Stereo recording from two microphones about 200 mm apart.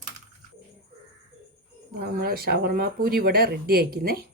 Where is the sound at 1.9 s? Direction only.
50° right (ahead or behind).